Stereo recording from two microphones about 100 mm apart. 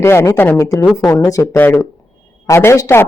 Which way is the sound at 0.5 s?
35° left (ahead or behind).